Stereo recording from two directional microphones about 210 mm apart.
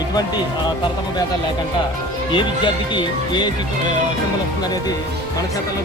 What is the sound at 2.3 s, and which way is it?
Speech, 20° left (ahead or behind).